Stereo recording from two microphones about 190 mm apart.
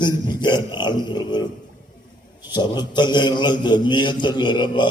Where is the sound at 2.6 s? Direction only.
20° left (ahead or behind).